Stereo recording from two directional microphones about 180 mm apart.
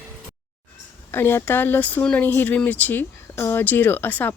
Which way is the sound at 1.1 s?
10° left (ahead or behind).